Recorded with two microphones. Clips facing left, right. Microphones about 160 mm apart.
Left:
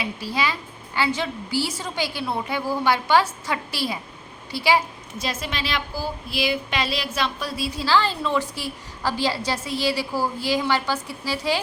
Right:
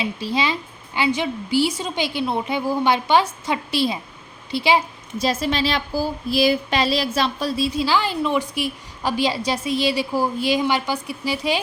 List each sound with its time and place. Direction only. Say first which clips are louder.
0.0 s a woman's voice: right 3 dB; 25° right (ahead or behind)
5.1 s speech: right 8 dB; 35° right (ahead or behind); by 11.6 s 15° right (ahead or behind)